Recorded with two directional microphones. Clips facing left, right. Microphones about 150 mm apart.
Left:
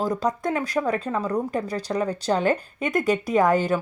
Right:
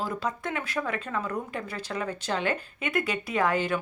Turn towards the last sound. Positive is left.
turn(degrees=40)  # may be behind; listen again after turning